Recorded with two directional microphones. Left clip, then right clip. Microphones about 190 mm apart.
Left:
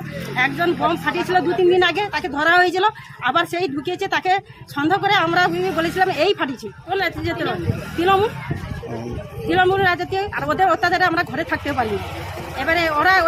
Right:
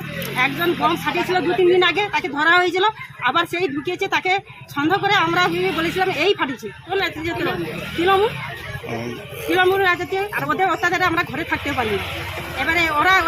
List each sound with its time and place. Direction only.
0.3 s a woman's voice: 20° left (ahead or behind)
9.5 s a woman's voice: 20° left (ahead or behind)